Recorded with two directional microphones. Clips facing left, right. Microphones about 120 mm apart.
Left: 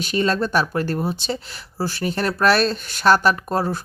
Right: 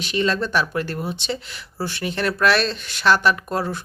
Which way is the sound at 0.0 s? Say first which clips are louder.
Left 1 dB; 40° left (ahead or behind).